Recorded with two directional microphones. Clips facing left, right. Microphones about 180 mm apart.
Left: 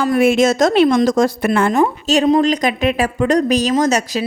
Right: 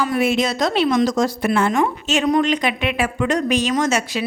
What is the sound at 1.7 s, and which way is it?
A woman's voice, 35° left (ahead or behind).